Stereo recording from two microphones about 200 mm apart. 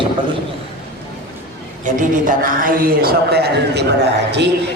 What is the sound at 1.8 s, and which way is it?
A man's voice, 40° right (ahead or behind).